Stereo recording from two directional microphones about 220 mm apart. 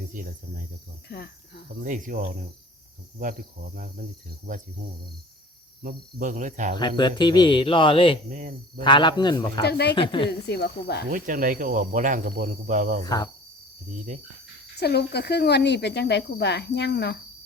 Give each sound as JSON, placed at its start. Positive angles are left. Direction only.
{"t": 0.1, "sound": "speech", "side_deg": -40}
{"t": 1.0, "sound": "speech", "side_deg": 50}
{"t": 1.8, "sound": "speech", "side_deg": -35}
{"t": 5.8, "sound": "speech", "side_deg": -40}
{"t": 6.7, "sound": "speech", "side_deg": 20}
{"t": 8.3, "sound": "speech", "side_deg": -40}
{"t": 8.8, "sound": "speech", "side_deg": 20}
{"t": 9.6, "sound": "speech", "side_deg": 50}
{"t": 9.9, "sound": "speech", "side_deg": 20}
{"t": 10.2, "sound": "speech", "side_deg": 50}
{"t": 11.1, "sound": "speech", "side_deg": -40}
{"t": 13.1, "sound": "speech", "side_deg": 15}
{"t": 14.8, "sound": "speech", "side_deg": 50}